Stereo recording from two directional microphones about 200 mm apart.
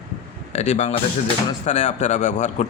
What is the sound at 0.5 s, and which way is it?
Speech, 35° left (ahead or behind).